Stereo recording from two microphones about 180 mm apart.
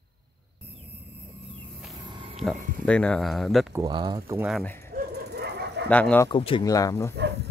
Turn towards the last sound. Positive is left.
turn(degrees=15)  # may be behind; listen again after turning